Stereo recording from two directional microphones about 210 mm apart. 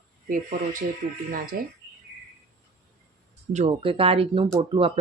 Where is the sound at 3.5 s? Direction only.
30° right (ahead or behind).